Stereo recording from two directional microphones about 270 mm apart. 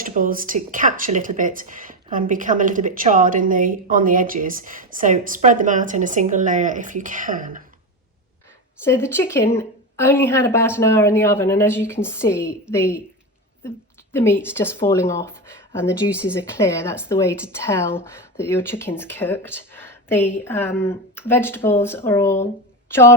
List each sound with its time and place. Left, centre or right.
0.0 s speech: right
8.8 s a woman's voice: centre